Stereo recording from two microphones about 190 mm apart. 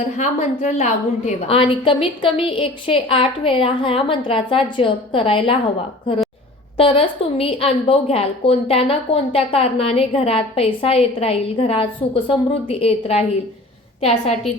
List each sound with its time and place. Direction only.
0.2 s a woman's voice: 40° left (ahead or behind)
6.7 s a woman's voice: 30° left (ahead or behind)